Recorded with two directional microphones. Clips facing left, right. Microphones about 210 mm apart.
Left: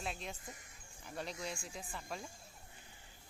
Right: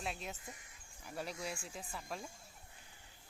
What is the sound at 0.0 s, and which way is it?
Speech, centre (ahead or behind).